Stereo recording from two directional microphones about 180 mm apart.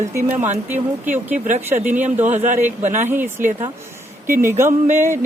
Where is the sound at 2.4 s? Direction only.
45° right (ahead or behind).